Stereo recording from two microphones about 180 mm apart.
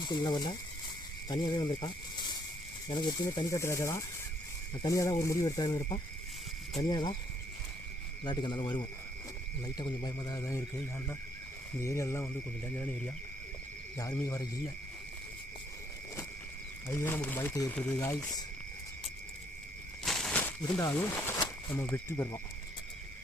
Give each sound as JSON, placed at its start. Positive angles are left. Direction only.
{"t": 0.0, "sound": "speech", "side_deg": 25}
{"t": 2.9, "sound": "speech", "side_deg": 25}
{"t": 8.2, "sound": "speech", "side_deg": 25}
{"t": 11.8, "sound": "speech", "side_deg": 15}
{"t": 14.0, "sound": "speech", "side_deg": 20}
{"t": 16.9, "sound": "speech", "side_deg": 15}
{"t": 20.1, "sound": "a sound", "side_deg": 0}
{"t": 20.7, "sound": "speech", "side_deg": 15}